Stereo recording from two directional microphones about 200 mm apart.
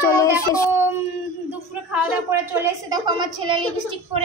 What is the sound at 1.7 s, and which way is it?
A woman's voice, 10° right (ahead or behind).